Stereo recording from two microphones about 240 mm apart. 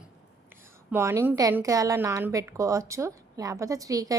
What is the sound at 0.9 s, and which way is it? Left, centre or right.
A woman's voice, centre.